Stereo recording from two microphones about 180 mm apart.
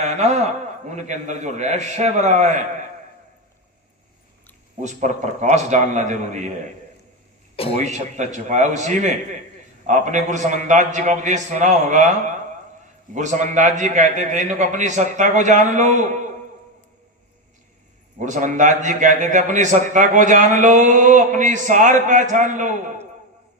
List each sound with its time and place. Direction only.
0.0 s a man's voice: 40° right (ahead or behind)
4.8 s a man's voice: 40° right (ahead or behind)
7.8 s a man's voice: 40° right (ahead or behind)
13.1 s a man's voice: 45° right (ahead or behind)
18.2 s a man's voice: 45° right (ahead or behind)